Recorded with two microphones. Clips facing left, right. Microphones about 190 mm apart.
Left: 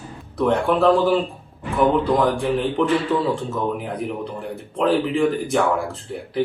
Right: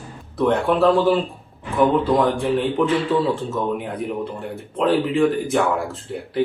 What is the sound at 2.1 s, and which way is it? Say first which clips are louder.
Speech: right 1 dB; centre (ahead or behind).